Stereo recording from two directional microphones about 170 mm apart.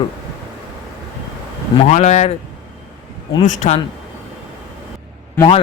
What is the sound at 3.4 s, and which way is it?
Speech, 45° left (ahead or behind).